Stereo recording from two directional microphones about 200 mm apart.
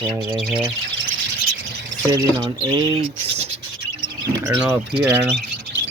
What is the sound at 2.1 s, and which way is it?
Speech, 20° right (ahead or behind).